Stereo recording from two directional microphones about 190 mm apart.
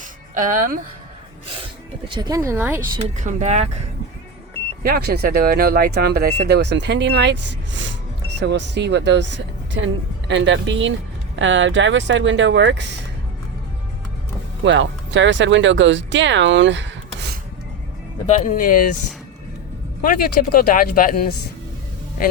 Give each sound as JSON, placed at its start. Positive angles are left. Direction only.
{"t": 0.3, "sound": "speech", "side_deg": -45}
{"t": 2.1, "sound": "speech", "side_deg": -20}
{"t": 3.0, "sound": "speech", "side_deg": -40}
{"t": 4.8, "sound": "speech", "side_deg": -55}
{"t": 14.6, "sound": "speech", "side_deg": -75}
{"t": 18.3, "sound": "speech", "side_deg": 40}
{"t": 20.0, "sound": "speech", "side_deg": 50}